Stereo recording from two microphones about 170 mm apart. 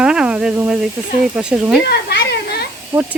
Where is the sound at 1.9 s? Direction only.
75° left (ahead or behind).